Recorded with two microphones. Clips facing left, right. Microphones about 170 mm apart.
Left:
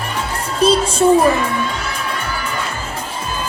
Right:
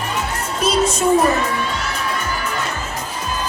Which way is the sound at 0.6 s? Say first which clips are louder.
Left 4 dB; 30° left (ahead or behind).